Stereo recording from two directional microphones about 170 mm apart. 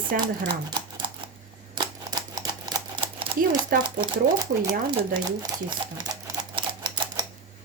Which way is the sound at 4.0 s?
25° right (ahead or behind).